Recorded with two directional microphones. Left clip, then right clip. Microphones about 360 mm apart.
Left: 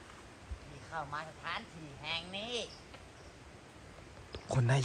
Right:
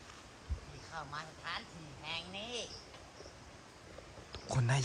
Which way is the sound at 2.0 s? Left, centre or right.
Left.